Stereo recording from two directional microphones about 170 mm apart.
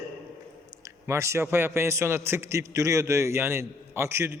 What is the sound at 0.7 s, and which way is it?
A man's voice, 15° right (ahead or behind).